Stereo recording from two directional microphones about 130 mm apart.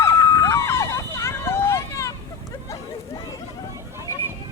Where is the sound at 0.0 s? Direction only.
20° left (ahead or behind).